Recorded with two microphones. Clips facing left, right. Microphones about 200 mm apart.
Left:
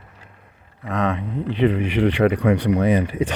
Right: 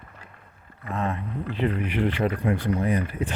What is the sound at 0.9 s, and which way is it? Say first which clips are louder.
Speech: left 6 dB; 90° left.